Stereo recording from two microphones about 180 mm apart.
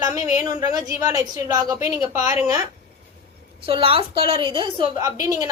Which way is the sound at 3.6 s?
30° right (ahead or behind).